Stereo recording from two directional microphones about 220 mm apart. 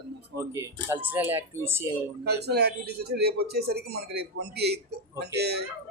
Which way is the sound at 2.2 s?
45° right (ahead or behind).